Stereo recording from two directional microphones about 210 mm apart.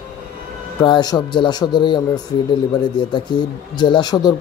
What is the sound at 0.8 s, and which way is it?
Speech, 20° left (ahead or behind).